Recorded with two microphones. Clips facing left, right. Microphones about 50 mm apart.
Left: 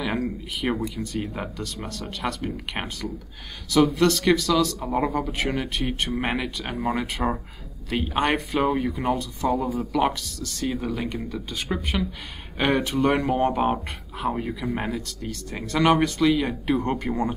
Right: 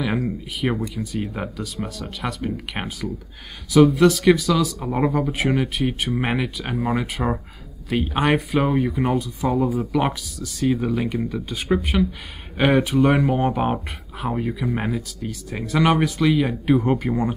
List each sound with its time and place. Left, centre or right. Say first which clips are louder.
0.0 s speech: right 3 dB; centre